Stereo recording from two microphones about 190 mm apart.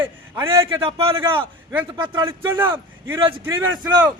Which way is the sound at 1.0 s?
30° right (ahead or behind).